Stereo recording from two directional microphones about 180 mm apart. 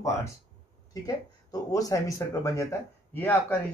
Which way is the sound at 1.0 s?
20° left (ahead or behind).